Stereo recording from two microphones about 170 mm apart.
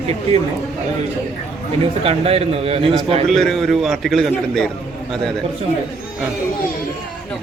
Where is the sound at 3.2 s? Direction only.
Centre (ahead or behind).